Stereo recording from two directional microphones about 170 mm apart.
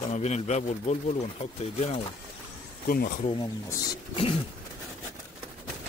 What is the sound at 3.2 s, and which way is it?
Speech, 25° left (ahead or behind).